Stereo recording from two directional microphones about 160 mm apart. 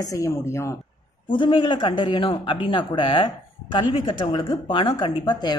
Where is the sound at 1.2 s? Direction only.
30° left (ahead or behind).